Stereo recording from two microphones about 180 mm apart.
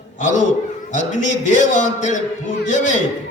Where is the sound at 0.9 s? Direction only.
45° left (ahead or behind).